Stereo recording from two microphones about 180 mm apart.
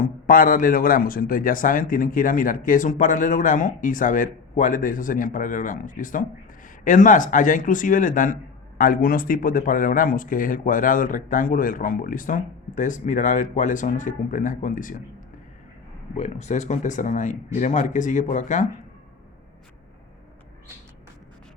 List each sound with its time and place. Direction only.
0.0 s a man's voice: 50° left (ahead or behind)
16.1 s a man's voice: 40° left (ahead or behind)